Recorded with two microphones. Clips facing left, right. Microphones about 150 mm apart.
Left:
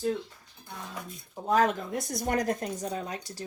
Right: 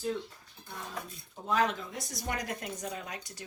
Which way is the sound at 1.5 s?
45° left (ahead or behind).